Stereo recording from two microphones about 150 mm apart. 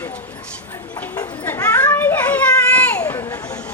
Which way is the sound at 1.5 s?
10° left (ahead or behind).